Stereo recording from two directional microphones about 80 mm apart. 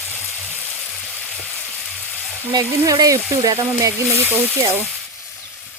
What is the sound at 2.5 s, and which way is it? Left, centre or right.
Frying, right.